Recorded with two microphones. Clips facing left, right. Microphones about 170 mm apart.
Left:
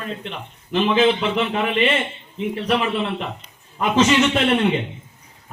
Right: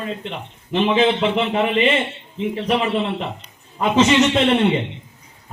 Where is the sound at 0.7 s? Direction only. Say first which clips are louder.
Even; 25° right (ahead or behind).